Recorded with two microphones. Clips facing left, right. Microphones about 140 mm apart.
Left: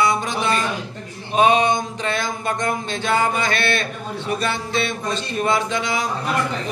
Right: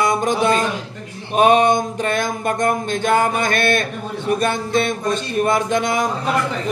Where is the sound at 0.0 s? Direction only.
45° right (ahead or behind).